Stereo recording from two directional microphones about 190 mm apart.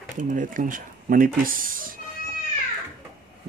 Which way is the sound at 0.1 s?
40° right (ahead or behind).